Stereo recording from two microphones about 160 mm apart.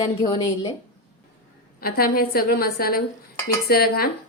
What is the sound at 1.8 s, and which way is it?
A woman's voice, 70° left (ahead or behind).